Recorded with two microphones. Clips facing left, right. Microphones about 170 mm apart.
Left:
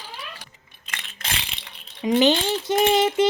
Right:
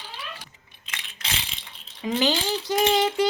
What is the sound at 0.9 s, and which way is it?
Coin, 55° left (ahead or behind).